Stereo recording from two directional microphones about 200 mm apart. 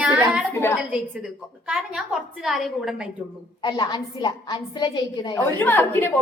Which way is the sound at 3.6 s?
20° left (ahead or behind).